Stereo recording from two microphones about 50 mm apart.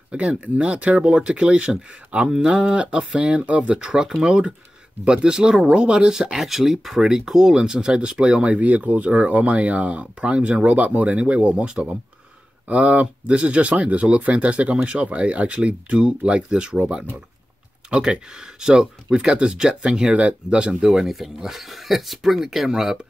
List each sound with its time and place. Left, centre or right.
0.1 s speech: right
6.3 s speech: centre
8.5 s speech: right
12.6 s speech: right
17.8 s speech: centre
20.8 s speech: centre